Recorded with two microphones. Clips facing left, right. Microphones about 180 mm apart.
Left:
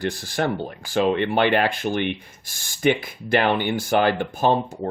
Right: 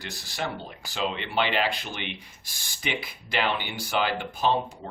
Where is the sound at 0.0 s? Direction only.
55° left (ahead or behind).